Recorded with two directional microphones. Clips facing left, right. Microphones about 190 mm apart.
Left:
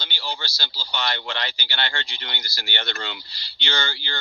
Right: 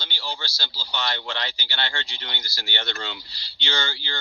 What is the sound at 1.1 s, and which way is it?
Speech, 65° left (ahead or behind).